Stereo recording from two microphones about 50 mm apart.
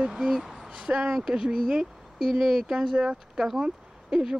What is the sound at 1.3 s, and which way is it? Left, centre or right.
Speech, centre.